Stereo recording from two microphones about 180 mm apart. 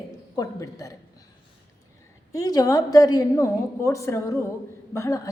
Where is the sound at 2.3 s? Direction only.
20° left (ahead or behind).